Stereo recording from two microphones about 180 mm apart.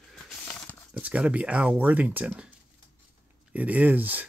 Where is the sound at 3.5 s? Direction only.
10° right (ahead or behind).